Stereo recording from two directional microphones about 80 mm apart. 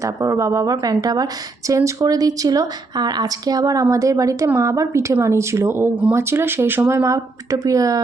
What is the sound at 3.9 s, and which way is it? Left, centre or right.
A woman's voice, right.